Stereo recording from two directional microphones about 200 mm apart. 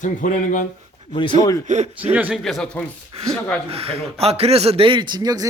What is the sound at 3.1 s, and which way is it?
Speech, 25° right (ahead or behind).